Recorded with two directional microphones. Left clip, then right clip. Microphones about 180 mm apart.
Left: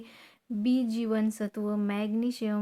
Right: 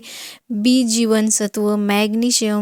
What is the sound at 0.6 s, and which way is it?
Speech, 45° right (ahead or behind).